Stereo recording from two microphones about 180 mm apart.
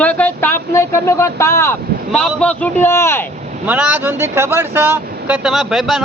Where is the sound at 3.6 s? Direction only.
10° right (ahead or behind).